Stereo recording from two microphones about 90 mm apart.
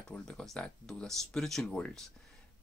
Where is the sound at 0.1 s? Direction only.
10° left (ahead or behind).